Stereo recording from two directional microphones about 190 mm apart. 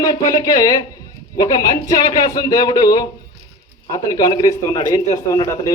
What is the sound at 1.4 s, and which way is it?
Speech, 20° left (ahead or behind).